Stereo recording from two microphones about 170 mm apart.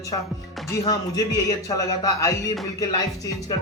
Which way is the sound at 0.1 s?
30° left (ahead or behind).